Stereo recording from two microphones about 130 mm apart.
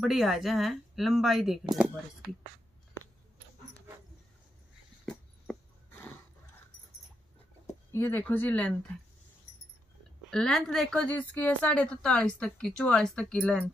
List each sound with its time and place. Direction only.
0.0 s speech: centre (ahead or behind)
5.0 s a sound: 10° left (ahead or behind)
7.6 s speech: 20° left (ahead or behind)
10.3 s speech: 5° left (ahead or behind)